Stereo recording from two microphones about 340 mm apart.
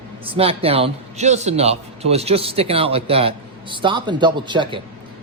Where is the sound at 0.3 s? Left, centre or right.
Centre.